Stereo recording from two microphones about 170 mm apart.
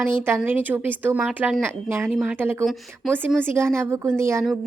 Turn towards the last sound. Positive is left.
turn(degrees=-15)  # may be behind; listen again after turning